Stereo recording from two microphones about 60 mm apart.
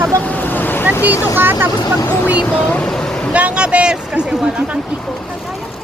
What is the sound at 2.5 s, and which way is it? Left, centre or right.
Speech, left.